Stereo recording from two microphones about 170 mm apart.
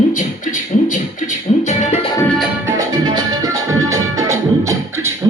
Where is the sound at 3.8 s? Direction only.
15° right (ahead or behind).